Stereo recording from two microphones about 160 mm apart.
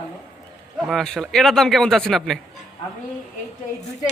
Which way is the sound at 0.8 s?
Centre (ahead or behind).